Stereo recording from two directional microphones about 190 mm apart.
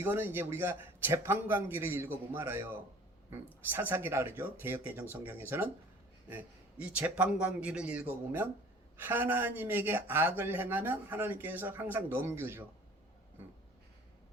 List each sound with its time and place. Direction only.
0.0 s speech: 10° right (ahead or behind)